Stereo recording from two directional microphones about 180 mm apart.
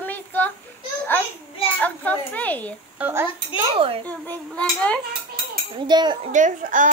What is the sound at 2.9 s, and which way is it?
Speech, 10° right (ahead or behind).